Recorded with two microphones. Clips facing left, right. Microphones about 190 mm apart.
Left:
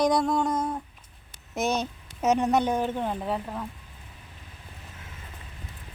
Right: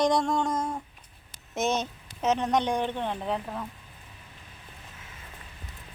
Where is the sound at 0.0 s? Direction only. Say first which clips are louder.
Left 1 dB; 5° left (ahead or behind).